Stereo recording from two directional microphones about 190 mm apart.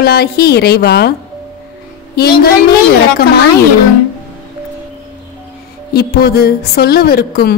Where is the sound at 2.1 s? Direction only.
55° left (ahead or behind).